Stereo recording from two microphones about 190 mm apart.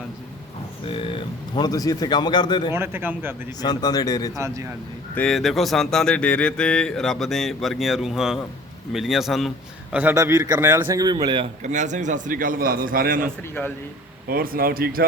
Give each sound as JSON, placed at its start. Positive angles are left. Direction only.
{"t": 0.9, "sound": "speech", "side_deg": 30}
{"t": 2.7, "sound": "speech", "side_deg": -10}
{"t": 3.6, "sound": "speech", "side_deg": 20}
{"t": 4.4, "sound": "speech", "side_deg": -15}
{"t": 5.1, "sound": "a man's voice", "side_deg": 5}
{"t": 11.6, "sound": "a man's voice", "side_deg": -40}
{"t": 13.5, "sound": "speech", "side_deg": 10}
{"t": 14.3, "sound": "a man's voice", "side_deg": -50}